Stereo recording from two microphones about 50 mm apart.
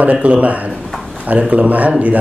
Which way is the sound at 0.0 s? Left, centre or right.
Right.